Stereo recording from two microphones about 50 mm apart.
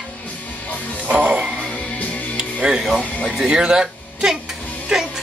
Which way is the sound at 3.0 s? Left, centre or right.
Left.